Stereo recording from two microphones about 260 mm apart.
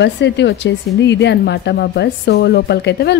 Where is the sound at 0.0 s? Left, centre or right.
Left.